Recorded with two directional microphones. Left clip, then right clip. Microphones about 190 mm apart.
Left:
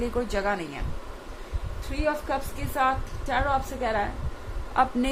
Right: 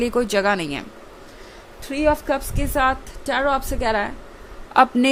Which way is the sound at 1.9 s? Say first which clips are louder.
Right 8 dB; 50° right (ahead or behind).